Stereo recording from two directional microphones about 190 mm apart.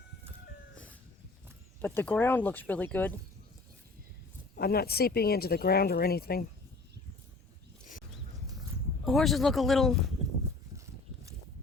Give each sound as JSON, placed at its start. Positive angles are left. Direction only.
{"t": 1.8, "sound": "speech", "side_deg": 10}
{"t": 4.5, "sound": "speech", "side_deg": 55}
{"t": 9.0, "sound": "speech", "side_deg": 0}